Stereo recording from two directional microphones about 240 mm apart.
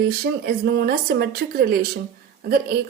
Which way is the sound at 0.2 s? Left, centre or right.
Right.